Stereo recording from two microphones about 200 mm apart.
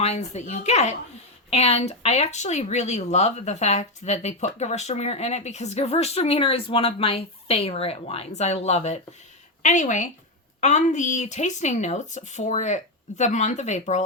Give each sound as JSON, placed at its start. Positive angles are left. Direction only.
{"t": 0.0, "sound": "speech", "side_deg": 35}